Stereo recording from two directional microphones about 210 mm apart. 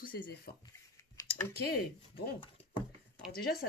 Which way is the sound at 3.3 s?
45° left (ahead or behind).